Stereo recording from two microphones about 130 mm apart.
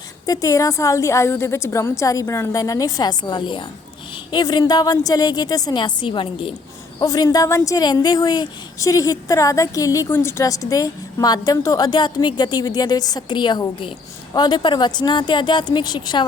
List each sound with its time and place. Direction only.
0.3 s a woman's voice: 25° left (ahead or behind); by 6.5 s 40° left (ahead or behind)
7.0 s a woman's voice: 30° left (ahead or behind)